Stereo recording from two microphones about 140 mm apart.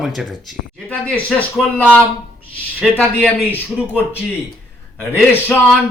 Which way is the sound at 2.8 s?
10° left (ahead or behind).